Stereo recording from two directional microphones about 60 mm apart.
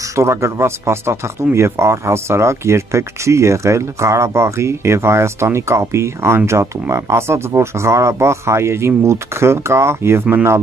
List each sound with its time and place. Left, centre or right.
0.1 s speech: right